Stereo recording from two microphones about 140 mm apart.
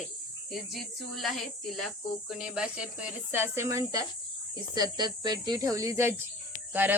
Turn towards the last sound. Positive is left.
turn(degrees=-15)  # may be behind; listen again after turning